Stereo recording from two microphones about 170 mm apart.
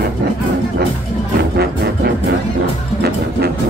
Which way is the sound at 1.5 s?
75° right (ahead or behind).